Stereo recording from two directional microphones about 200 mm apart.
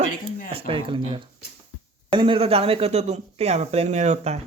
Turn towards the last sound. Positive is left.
turn(degrees=-35)  # may be behind; listen again after turning